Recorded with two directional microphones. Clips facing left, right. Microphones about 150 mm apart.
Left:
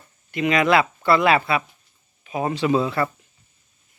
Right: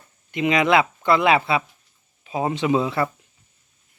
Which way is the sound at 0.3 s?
20° right (ahead or behind).